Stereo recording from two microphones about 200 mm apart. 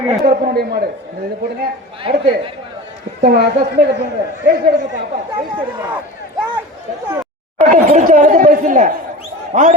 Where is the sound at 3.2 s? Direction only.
50° right (ahead or behind).